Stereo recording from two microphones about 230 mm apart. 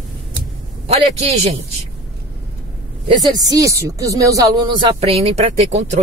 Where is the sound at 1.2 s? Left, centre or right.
Right.